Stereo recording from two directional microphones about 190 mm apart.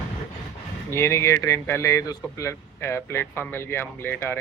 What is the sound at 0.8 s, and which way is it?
Speech, 15° left (ahead or behind).